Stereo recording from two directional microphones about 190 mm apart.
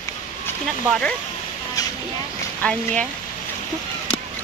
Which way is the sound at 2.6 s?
5° left (ahead or behind).